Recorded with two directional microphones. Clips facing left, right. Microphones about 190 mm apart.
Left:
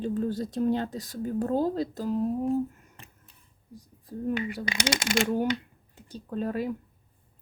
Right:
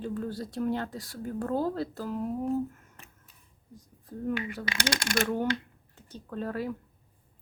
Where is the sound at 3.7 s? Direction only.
10° left (ahead or behind).